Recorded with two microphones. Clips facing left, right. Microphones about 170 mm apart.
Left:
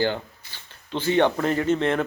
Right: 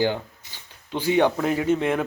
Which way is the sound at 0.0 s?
15° right (ahead or behind).